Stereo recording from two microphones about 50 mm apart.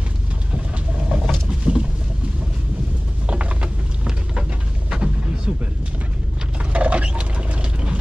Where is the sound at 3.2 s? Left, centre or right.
Right.